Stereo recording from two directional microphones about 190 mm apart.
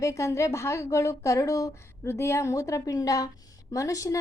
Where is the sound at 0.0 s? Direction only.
15° left (ahead or behind).